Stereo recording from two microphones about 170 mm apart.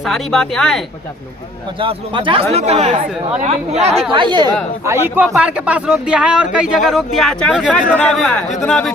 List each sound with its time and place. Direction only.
0.0 s speech: centre (ahead or behind)
1.8 s speech: 30° right (ahead or behind)
4.1 s speech: 25° right (ahead or behind)
4.9 s speech: 10° right (ahead or behind); by 8.9 s 5° left (ahead or behind)